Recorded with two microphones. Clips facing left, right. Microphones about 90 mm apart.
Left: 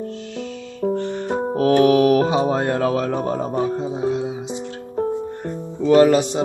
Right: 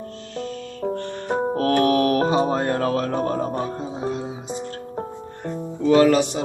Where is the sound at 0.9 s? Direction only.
20° left (ahead or behind).